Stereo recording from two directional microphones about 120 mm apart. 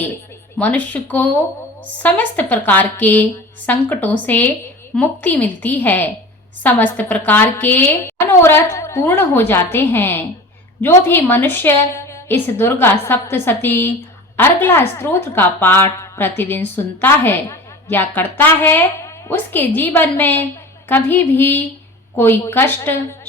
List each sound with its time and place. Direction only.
0.6 s a woman's voice: 15° left (ahead or behind)